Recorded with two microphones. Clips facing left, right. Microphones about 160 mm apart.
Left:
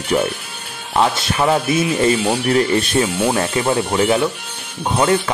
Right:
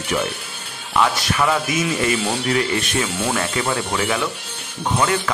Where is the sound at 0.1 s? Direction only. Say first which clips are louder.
Left 5 dB; 35° left (ahead or behind).